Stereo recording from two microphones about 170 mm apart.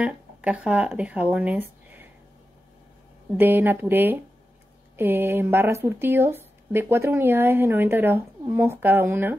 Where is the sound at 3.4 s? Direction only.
10° right (ahead or behind).